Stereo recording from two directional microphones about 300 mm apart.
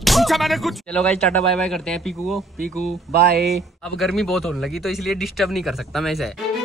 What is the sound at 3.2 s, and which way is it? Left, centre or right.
Speech, right.